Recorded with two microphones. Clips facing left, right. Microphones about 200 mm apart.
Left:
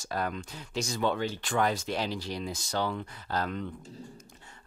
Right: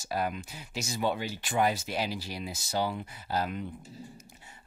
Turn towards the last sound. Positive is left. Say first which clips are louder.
# left 1 dB
turn(degrees=-10)  # may be behind; listen again after turning